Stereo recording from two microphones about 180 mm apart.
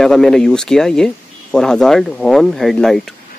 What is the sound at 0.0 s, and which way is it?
Speech, 5° left (ahead or behind).